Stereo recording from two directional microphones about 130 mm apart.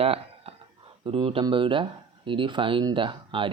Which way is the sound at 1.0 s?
45° right (ahead or behind).